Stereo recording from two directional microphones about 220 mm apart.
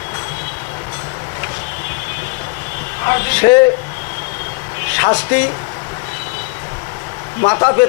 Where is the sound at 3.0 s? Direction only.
15° left (ahead or behind).